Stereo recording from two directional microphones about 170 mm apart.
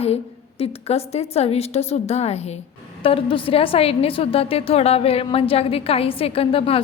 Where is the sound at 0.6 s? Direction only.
35° left (ahead or behind).